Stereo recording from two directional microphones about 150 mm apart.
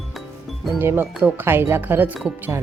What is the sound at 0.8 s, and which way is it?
Speech, 15° right (ahead or behind).